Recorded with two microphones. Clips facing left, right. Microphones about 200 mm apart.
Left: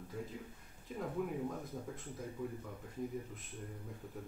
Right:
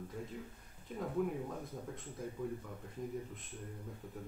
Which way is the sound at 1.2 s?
Centre (ahead or behind).